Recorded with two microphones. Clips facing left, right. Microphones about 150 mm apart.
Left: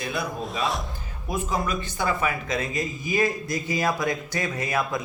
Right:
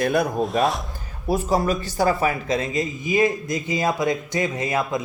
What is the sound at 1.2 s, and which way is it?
Speech, 40° right (ahead or behind).